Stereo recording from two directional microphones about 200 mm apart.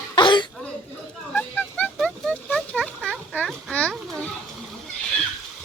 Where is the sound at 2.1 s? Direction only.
Centre (ahead or behind).